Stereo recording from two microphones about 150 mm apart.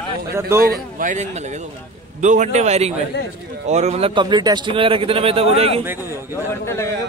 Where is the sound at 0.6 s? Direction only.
70° right (ahead or behind); by 4.1 s 45° right (ahead or behind).